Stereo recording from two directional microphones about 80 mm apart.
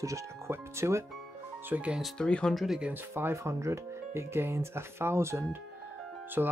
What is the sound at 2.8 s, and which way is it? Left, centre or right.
Speech, right.